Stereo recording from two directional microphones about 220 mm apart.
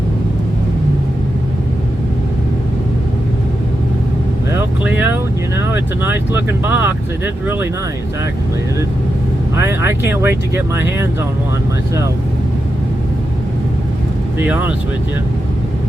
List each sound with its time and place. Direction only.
4.8 s speech: 5° right (ahead or behind)
9.6 s speech: 10° right (ahead or behind)
14.3 s speech: 10° right (ahead or behind)